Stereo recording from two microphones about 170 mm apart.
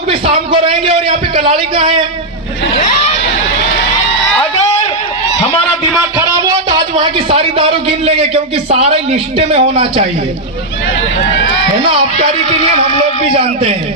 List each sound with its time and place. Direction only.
0.1 s a man's voice: 30° right (ahead or behind)
6.1 s a man's voice: 25° right (ahead or behind)
13.3 s a man's voice: 35° right (ahead or behind)